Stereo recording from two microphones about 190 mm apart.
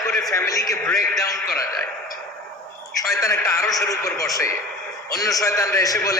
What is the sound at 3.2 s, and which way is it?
A man's voice, 15° left (ahead or behind).